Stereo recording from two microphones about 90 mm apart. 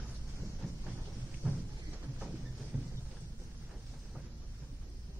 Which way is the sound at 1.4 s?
10° right (ahead or behind).